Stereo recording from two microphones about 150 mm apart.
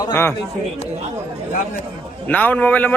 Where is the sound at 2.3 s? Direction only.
10° left (ahead or behind).